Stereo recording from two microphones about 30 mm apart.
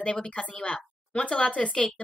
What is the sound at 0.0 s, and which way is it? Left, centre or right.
Speech, left.